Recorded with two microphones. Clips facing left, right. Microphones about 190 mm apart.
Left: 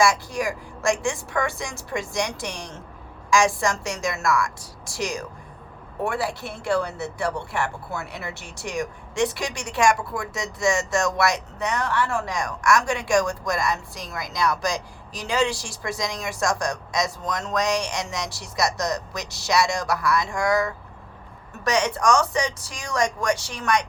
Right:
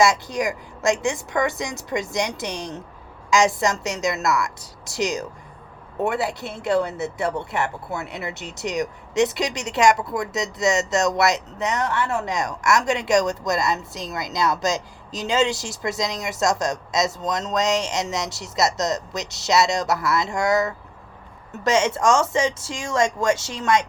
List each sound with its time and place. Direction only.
0.0 s speech: 20° right (ahead or behind)